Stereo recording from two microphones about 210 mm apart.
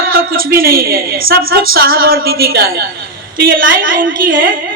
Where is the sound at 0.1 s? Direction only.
45° right (ahead or behind).